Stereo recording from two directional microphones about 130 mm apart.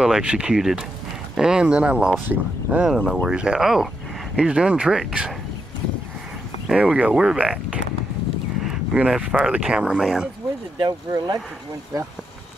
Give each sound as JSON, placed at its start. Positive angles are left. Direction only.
{"t": 0.0, "sound": "speech", "side_deg": -5}
{"t": 6.7, "sound": "speech", "side_deg": -10}
{"t": 10.8, "sound": "speech", "side_deg": -30}